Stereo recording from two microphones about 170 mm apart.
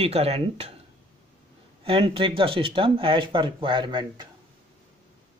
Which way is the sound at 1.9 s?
30° right (ahead or behind).